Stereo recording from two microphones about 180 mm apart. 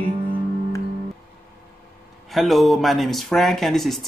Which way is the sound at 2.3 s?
Centre (ahead or behind).